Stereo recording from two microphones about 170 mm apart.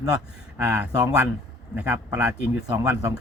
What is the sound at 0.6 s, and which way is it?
Speech, 10° right (ahead or behind).